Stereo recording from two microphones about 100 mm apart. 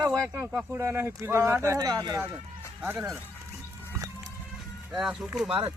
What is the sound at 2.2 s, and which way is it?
Speech, 25° right (ahead or behind).